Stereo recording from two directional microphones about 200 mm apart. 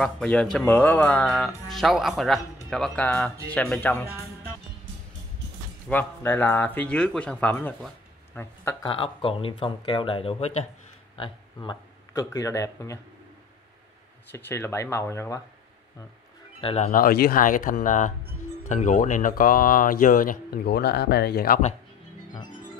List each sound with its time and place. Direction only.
0.0 s speech: 5° left (ahead or behind)
5.9 s speech: 10° left (ahead or behind)
8.8 s speech: 25° left (ahead or behind)
14.3 s speech: 15° left (ahead or behind)
16.6 s speech: 30° left (ahead or behind)
17.0 s speech: 50° left (ahead or behind)